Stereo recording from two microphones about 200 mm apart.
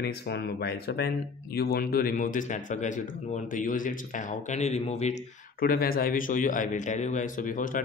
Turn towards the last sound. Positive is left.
turn(degrees=40)  # may be behind; listen again after turning